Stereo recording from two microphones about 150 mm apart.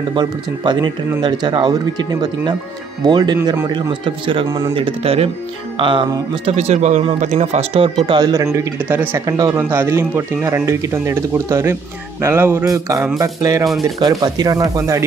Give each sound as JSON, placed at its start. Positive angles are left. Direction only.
{"t": 0.1, "sound": "speech", "side_deg": -30}
{"t": 4.5, "sound": "speech", "side_deg": -25}
{"t": 6.5, "sound": "speech", "side_deg": -50}
{"t": 8.2, "sound": "speech", "side_deg": -20}
{"t": 9.2, "sound": "speech", "side_deg": -25}
{"t": 9.6, "sound": "speech", "side_deg": -15}